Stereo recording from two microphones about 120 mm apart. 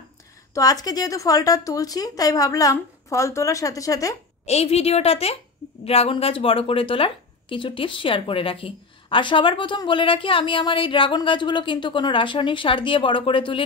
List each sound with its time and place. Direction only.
0.6 s a woman's voice: 30° left (ahead or behind)
4.5 s a woman's voice: 60° left (ahead or behind)